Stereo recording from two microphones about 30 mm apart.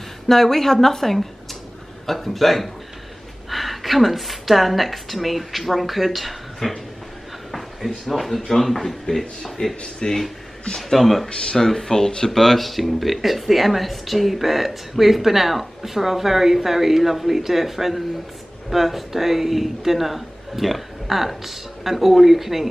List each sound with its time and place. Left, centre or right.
0.3 s a woman's voice: centre
9.6 s speech: left
10.0 s speech: left
11.0 s a woman's voice: centre